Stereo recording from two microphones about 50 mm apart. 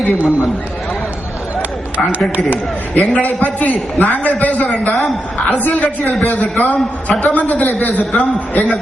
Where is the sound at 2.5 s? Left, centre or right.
Left.